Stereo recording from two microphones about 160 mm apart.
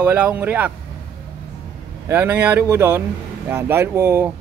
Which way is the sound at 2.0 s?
15° right (ahead or behind).